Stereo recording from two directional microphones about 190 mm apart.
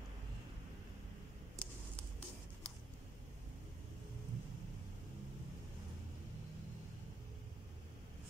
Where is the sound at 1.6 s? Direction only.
5° left (ahead or behind).